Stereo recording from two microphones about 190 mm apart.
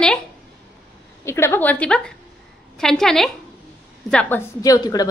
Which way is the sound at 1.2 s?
15° left (ahead or behind).